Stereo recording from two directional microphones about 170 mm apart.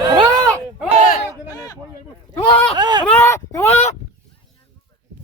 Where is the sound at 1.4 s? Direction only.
20° left (ahead or behind).